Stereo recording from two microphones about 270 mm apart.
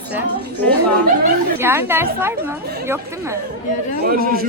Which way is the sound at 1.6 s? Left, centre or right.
Centre.